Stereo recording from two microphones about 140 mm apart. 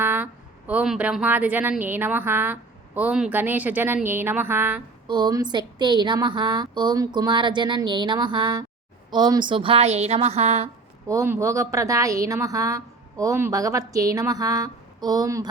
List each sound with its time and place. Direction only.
0.0 s a sound: 15° right (ahead or behind)
0.7 s a woman's voice: 10° right (ahead or behind)
5.0 s a woman's voice: 30° right (ahead or behind); by 10.7 s 50° right (ahead or behind)
11.1 s a woman's voice: 20° right (ahead or behind)